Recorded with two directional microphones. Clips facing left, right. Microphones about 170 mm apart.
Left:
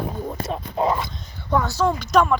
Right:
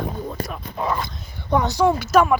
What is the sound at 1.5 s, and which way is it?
Speech, 20° right (ahead or behind).